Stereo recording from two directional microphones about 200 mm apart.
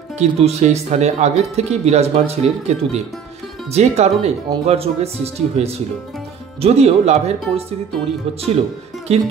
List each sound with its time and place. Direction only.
0.2 s speech: 35° right (ahead or behind)
9.1 s speech: 30° right (ahead or behind)